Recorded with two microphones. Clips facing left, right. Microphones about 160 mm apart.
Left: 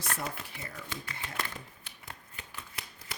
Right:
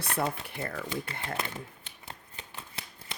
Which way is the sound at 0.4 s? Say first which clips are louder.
Right 8 dB; 60° right (ahead or behind).